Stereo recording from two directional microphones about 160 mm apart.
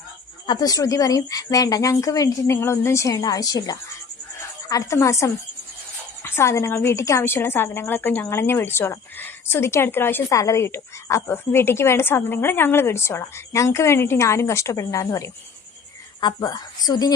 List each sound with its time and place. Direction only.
0.4 s a woman's voice: 25° left (ahead or behind)